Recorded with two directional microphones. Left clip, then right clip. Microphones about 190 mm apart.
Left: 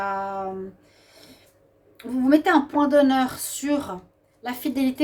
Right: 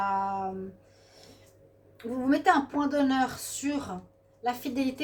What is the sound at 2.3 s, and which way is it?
A woman's voice, 45° left (ahead or behind).